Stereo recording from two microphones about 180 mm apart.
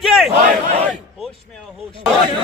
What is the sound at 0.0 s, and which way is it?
Battle cry, centre (ahead or behind).